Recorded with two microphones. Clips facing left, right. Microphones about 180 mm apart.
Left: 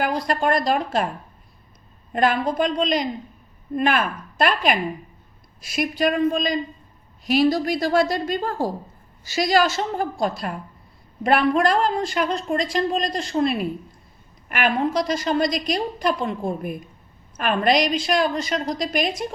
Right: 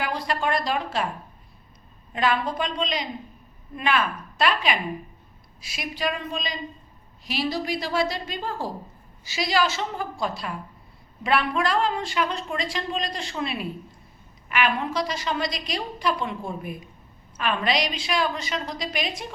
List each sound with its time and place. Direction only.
0.0 s a man's voice: 45° left (ahead or behind)
2.1 s a man's voice: 50° left (ahead or behind)